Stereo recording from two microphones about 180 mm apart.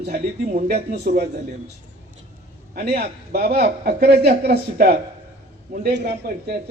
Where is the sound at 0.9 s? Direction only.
60° right (ahead or behind).